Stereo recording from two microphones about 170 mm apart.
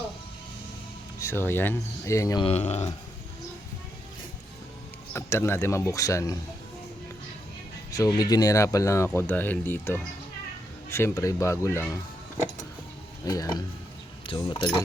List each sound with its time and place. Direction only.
1.2 s speech: 15° left (ahead or behind)
2.4 s speech: 40° left (ahead or behind)
5.1 s speech: 15° left (ahead or behind)
7.9 s speech: 20° left (ahead or behind)
13.2 s speech: 20° left (ahead or behind)